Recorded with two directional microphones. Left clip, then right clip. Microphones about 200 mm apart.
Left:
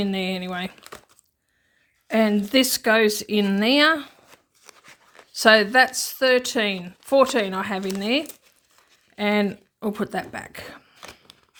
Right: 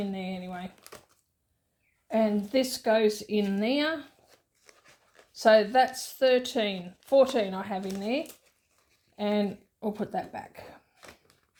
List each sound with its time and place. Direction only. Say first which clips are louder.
0.0 s speech: left 10 dB; 45° left (ahead or behind)
2.0 s speech: left 6 dB; 35° left (ahead or behind)